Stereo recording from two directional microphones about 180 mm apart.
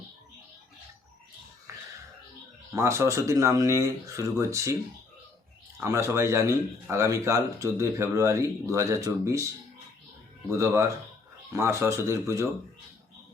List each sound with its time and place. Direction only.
1.7 s a sound: 15° right (ahead or behind)
2.7 s speech: 15° right (ahead or behind)
5.8 s speech: 15° right (ahead or behind)
10.6 s speech: 15° right (ahead or behind)